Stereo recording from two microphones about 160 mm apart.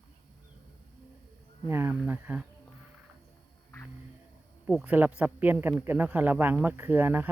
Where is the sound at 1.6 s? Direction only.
15° right (ahead or behind).